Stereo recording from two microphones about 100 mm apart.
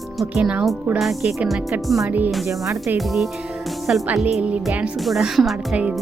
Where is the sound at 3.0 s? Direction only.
Centre (ahead or behind).